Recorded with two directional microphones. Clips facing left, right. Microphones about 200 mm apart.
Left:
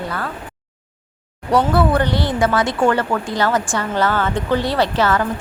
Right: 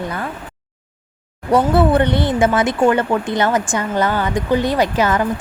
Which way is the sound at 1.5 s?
25° right (ahead or behind).